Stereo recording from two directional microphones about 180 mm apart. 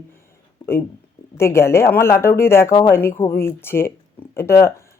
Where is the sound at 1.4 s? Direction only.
15° left (ahead or behind).